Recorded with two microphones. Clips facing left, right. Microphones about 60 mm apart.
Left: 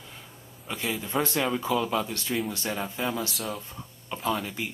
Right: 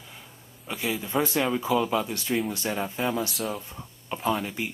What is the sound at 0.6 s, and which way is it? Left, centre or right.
Speech, centre.